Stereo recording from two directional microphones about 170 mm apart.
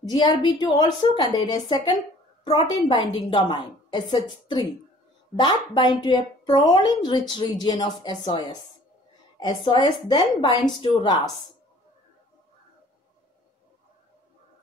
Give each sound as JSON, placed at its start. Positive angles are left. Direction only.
{"t": 0.0, "sound": "speech", "side_deg": 25}